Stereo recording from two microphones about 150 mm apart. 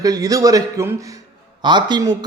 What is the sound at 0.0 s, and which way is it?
A man's voice, 25° right (ahead or behind).